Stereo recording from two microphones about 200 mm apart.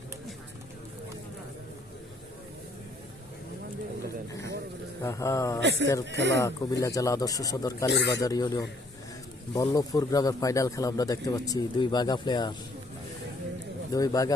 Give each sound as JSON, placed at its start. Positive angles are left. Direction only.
{"t": 5.0, "sound": "speech", "side_deg": 15}
{"t": 5.5, "sound": "speech", "side_deg": -60}
{"t": 6.4, "sound": "speech", "side_deg": 15}
{"t": 7.9, "sound": "speech", "side_deg": 60}
{"t": 8.2, "sound": "speech", "side_deg": 15}
{"t": 13.9, "sound": "speech", "side_deg": 15}